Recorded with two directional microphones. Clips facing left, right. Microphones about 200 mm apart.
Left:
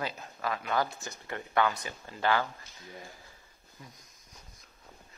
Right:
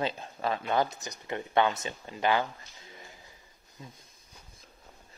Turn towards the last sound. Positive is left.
turn(degrees=-25)  # may be behind; listen again after turning